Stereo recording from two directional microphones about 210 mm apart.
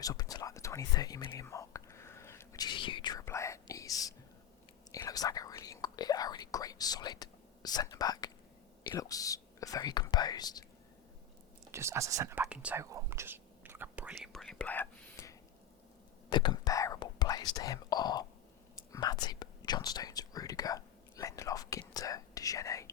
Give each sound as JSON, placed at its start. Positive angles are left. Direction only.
{"t": 0.0, "sound": "whispering", "side_deg": 15}
{"t": 8.9, "sound": "speech", "side_deg": 15}
{"t": 11.7, "sound": "speech", "side_deg": -15}
{"t": 16.3, "sound": "whispering", "side_deg": 20}
{"t": 17.5, "sound": "speech", "side_deg": 15}